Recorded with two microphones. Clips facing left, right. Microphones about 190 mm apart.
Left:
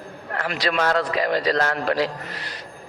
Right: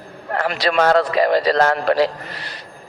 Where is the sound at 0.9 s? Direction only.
35° right (ahead or behind).